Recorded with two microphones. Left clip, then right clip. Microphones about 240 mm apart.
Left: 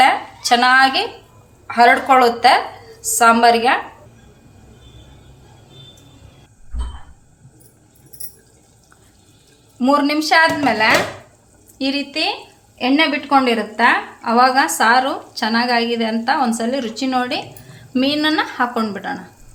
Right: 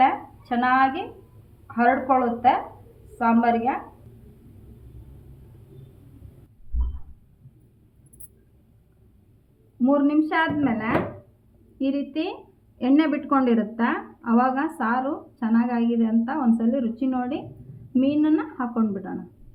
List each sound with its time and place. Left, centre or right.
0.0 s a sound: left
1.6 s a woman's voice: left
10.2 s a woman's voice: centre